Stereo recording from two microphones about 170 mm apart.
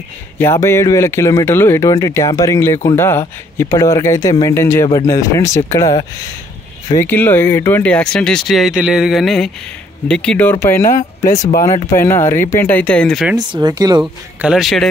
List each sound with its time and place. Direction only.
0.4 s speech: 15° left (ahead or behind)
11.9 s speech: 15° left (ahead or behind); by 13.4 s centre (ahead or behind)
13.4 s speech: 25° right (ahead or behind)
14.4 s speech: 5° right (ahead or behind)